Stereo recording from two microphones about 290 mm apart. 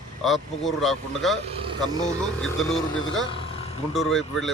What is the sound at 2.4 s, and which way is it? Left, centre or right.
Speech, centre.